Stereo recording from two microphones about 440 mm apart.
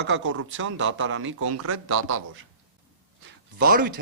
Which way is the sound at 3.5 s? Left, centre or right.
Centre.